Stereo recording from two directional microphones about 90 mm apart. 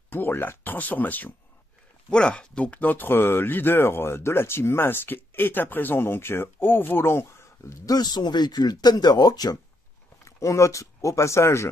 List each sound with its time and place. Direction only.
0.1 s speech: 20° left (ahead or behind); by 9.6 s 45° left (ahead or behind)
10.2 s speech: 35° left (ahead or behind)